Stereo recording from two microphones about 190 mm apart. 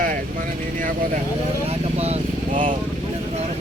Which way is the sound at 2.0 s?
35° right (ahead or behind).